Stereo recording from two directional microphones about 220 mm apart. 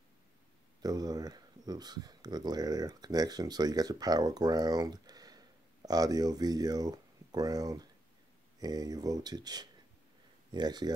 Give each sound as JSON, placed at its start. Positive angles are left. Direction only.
{"t": 0.8, "sound": "speech", "side_deg": -15}